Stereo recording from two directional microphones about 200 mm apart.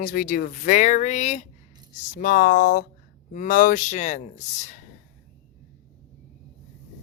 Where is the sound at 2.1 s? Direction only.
45° left (ahead or behind).